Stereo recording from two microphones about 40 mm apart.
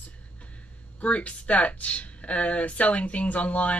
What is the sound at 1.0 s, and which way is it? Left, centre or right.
Speech, left.